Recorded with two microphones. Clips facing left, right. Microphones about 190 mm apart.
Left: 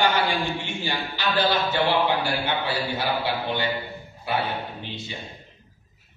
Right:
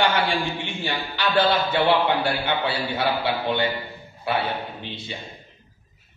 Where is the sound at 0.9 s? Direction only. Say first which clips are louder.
Right 2 dB; 55° right (ahead or behind).